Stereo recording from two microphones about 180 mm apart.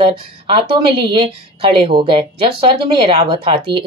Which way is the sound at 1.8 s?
30° right (ahead or behind).